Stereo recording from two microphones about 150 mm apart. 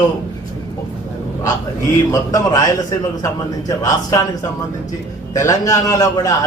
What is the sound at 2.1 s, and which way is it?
A man's voice, 20° left (ahead or behind).